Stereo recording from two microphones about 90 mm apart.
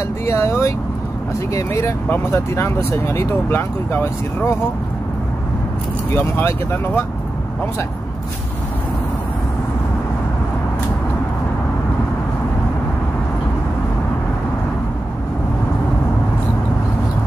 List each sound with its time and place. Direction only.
0.3 s speech: 30° left (ahead or behind)
6.1 s speech: 25° left (ahead or behind)